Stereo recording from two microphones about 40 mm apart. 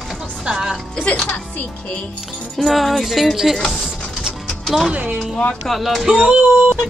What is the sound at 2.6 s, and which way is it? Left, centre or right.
Music, centre.